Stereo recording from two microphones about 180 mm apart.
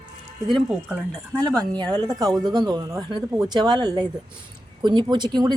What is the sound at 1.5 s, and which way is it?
Speech, 20° right (ahead or behind).